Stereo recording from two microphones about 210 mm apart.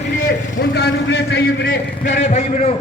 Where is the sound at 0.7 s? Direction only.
55° left (ahead or behind).